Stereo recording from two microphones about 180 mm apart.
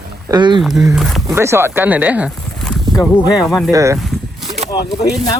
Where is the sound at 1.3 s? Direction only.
15° right (ahead or behind).